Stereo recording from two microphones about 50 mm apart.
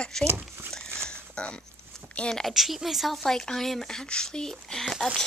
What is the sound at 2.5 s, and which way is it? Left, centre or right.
Speech, centre.